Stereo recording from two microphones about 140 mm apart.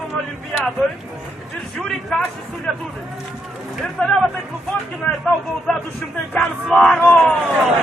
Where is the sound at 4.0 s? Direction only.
5° left (ahead or behind).